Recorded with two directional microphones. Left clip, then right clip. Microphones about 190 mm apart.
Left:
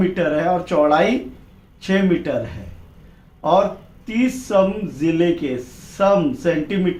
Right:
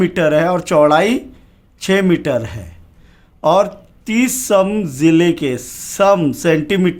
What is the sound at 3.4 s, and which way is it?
Speech, 60° right (ahead or behind).